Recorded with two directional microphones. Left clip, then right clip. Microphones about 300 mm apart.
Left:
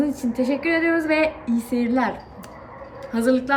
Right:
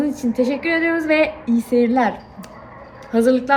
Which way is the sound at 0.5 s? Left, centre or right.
Right.